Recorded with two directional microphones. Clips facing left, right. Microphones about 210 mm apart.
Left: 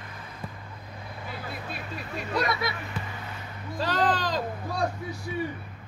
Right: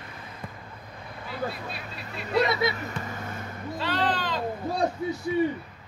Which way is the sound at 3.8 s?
40° left (ahead or behind).